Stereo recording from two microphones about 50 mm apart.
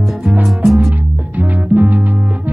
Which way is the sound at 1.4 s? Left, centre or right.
Right.